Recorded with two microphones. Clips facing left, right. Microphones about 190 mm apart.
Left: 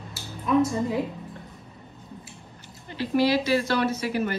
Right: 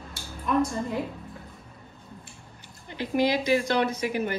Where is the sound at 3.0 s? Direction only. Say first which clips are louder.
Left 2 dB; 15° right (ahead or behind).